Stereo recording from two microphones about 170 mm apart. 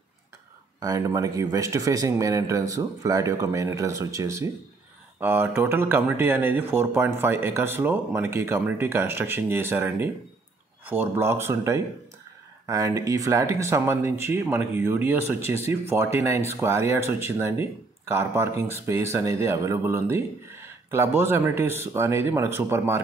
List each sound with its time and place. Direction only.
0.7 s speech: 20° right (ahead or behind)